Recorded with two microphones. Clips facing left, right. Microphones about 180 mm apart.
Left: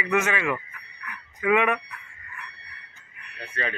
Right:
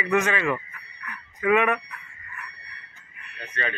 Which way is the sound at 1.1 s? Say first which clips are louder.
Right 1 dB; 15° left (ahead or behind).